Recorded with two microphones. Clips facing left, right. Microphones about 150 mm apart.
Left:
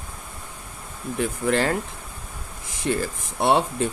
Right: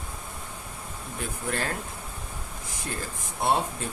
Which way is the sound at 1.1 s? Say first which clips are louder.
Left 9 dB; 90° left.